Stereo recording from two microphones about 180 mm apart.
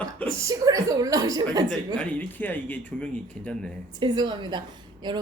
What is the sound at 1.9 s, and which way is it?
Speech, 10° left (ahead or behind).